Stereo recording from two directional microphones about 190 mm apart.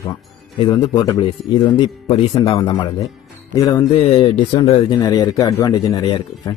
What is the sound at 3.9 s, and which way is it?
A man's voice, 30° left (ahead or behind).